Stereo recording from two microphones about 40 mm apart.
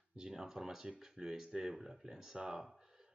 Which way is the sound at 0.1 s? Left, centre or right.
Centre.